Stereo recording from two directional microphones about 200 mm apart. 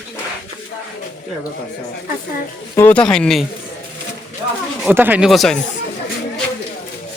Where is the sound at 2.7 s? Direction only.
10° left (ahead or behind).